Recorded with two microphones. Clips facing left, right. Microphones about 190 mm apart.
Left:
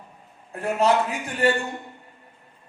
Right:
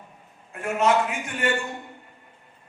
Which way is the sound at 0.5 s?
35° left (ahead or behind).